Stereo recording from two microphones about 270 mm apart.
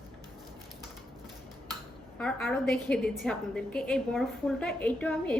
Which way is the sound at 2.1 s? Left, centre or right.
Centre.